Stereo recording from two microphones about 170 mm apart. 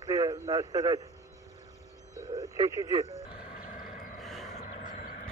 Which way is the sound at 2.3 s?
20° right (ahead or behind).